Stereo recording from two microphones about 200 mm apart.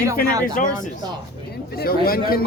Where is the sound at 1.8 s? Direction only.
50° left (ahead or behind).